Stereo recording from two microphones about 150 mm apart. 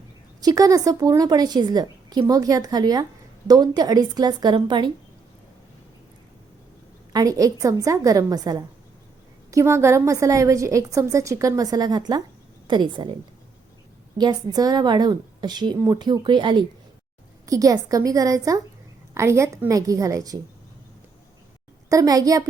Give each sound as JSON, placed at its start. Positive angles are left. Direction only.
{"t": 0.4, "sound": "a woman's voice", "side_deg": -25}
{"t": 7.1, "sound": "a woman's voice", "side_deg": -25}
{"t": 14.2, "sound": "a woman's voice", "side_deg": -25}
{"t": 21.8, "sound": "a woman's voice", "side_deg": -25}